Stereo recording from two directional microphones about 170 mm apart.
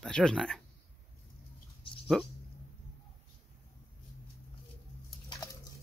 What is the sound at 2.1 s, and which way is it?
Speech, 5° left (ahead or behind).